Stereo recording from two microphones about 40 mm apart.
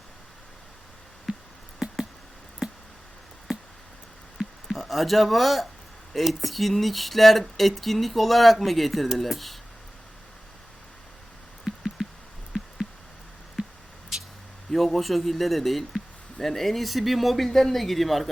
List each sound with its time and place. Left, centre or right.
1.3 s a sound: right
1.8 s a sound: centre
4.8 s speech: centre
11.6 s music: centre
14.1 s vehicle: centre
14.7 s speech: centre